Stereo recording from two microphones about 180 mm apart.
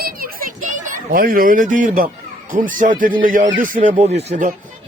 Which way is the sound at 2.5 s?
50° right (ahead or behind).